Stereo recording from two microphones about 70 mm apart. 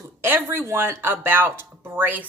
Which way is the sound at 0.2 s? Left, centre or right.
Right.